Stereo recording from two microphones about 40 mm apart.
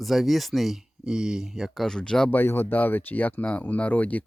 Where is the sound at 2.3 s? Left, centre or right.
Left.